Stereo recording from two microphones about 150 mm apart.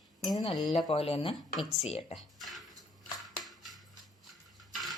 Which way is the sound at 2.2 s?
Centre (ahead or behind).